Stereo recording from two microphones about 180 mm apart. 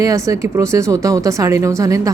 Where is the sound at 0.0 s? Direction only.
20° right (ahead or behind).